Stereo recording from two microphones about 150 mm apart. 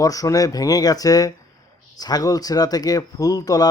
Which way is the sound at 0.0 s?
25° left (ahead or behind).